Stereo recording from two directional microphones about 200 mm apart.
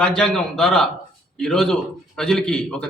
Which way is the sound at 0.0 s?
5° left (ahead or behind).